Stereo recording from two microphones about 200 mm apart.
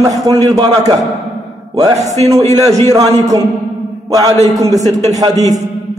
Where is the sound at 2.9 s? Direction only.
20° right (ahead or behind).